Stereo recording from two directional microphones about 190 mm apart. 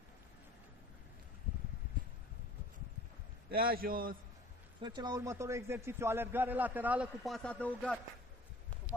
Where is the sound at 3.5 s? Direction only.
50° right (ahead or behind).